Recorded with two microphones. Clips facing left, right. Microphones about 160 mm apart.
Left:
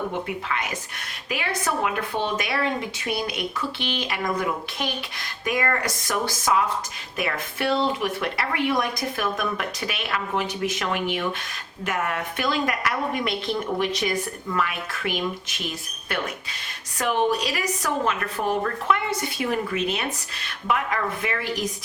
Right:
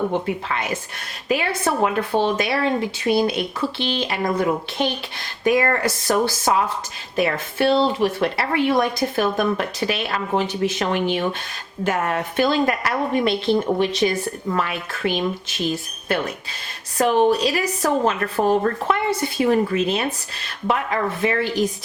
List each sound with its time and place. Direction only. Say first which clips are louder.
0.1 s a woman's voice: right 5 dB; 30° right (ahead or behind)